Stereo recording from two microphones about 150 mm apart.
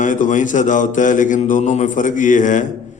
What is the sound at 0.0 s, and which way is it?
A man's voice, 60° left (ahead or behind).